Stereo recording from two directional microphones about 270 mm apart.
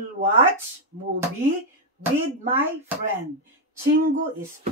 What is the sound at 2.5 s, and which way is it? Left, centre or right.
Speech, centre.